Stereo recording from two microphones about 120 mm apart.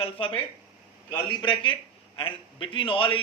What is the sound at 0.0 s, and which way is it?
A man's voice, 50° left (ahead or behind).